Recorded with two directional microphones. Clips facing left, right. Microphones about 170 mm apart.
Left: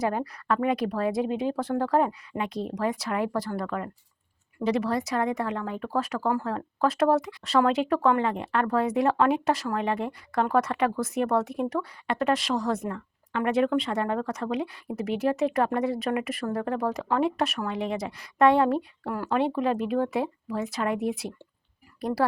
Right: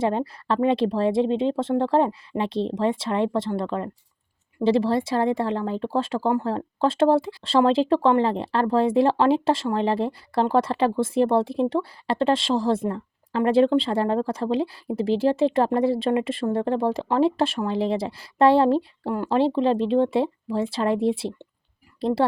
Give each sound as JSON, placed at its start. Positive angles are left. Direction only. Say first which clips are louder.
{"t": 0.0, "sound": "speech", "louder": "right 4 dB", "side_deg": -25}